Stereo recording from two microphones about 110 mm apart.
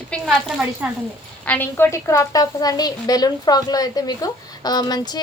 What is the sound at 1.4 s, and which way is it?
A woman's voice, 15° left (ahead or behind).